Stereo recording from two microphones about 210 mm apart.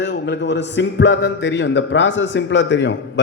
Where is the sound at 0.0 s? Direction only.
55° left (ahead or behind).